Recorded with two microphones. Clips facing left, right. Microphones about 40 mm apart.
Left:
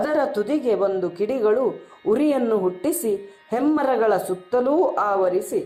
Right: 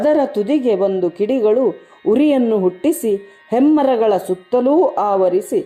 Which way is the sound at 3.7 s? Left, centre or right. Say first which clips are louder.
Right 5 dB; right.